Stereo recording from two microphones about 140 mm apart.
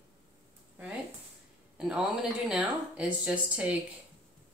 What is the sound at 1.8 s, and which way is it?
A man's voice, 5° right (ahead or behind).